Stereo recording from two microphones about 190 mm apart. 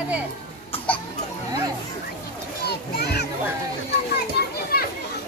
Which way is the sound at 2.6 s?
55° left (ahead or behind).